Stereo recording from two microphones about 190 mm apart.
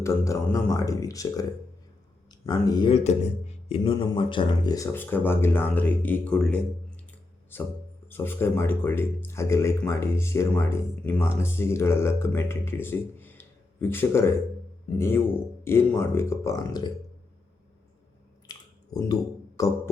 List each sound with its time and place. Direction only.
0.0 s speech: 15° left (ahead or behind)
18.5 s a sound: 20° left (ahead or behind)
18.9 s speech: 20° left (ahead or behind)